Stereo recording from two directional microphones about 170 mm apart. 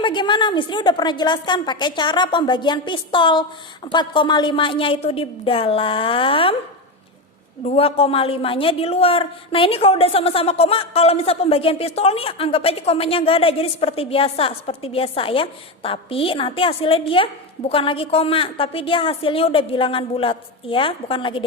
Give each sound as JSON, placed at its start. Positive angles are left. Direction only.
{"t": 0.0, "sound": "a woman's voice", "side_deg": 30}
{"t": 7.6, "sound": "a woman's voice", "side_deg": 40}